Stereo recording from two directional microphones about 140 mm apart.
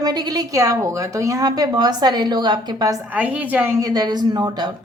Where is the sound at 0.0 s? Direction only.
30° right (ahead or behind).